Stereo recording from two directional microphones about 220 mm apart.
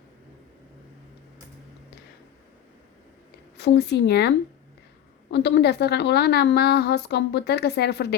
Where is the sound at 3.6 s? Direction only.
50° left (ahead or behind).